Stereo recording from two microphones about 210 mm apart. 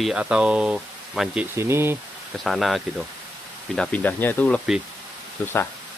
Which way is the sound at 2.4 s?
Centre (ahead or behind).